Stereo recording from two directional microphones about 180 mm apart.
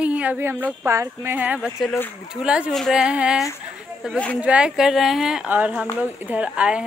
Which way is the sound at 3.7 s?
Centre (ahead or behind).